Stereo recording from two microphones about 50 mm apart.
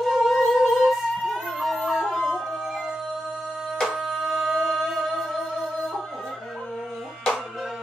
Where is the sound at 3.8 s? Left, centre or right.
Centre.